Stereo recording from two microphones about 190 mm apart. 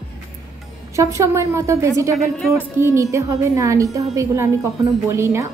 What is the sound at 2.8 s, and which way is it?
A woman's voice, 15° right (ahead or behind).